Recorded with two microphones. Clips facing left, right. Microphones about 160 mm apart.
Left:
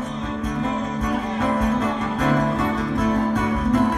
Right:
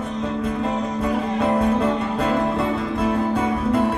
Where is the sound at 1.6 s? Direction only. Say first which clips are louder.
Right 2 dB; 30° right (ahead or behind).